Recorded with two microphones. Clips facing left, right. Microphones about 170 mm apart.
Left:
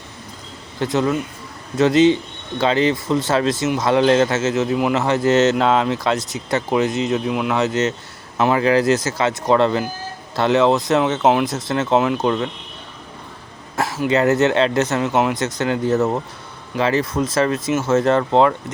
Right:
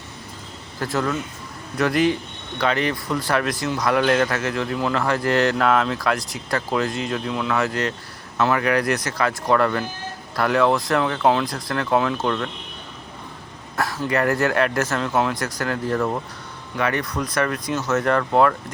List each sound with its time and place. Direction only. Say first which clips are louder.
0.8 s speech: left 5 dB; 20° left (ahead or behind)
14.0 s speech: left 5 dB; 20° left (ahead or behind)